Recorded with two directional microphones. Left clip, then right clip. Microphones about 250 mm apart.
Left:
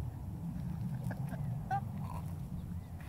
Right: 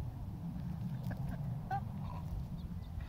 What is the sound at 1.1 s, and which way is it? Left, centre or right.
Duck, centre.